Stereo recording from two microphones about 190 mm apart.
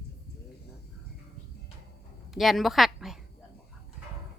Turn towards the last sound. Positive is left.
turn(degrees=0)  # may be behind; listen again after turning